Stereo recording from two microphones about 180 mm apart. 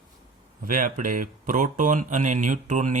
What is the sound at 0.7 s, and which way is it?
Speech, 50° right (ahead or behind).